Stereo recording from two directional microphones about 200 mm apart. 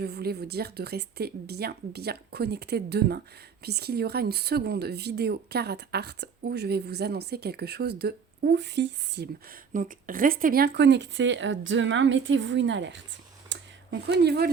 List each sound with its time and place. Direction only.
0.0 s speech: 55° right (ahead or behind)
9.7 s speech: 45° right (ahead or behind); by 13.0 s 65° right (ahead or behind)
13.5 s a sound: 60° right (ahead or behind)